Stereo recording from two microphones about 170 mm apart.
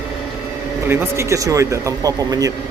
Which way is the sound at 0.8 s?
15° right (ahead or behind).